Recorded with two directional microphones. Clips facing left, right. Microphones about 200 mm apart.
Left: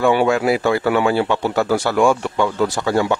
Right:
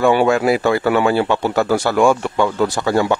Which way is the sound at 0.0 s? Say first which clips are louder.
Right 2 dB; 45° right (ahead or behind).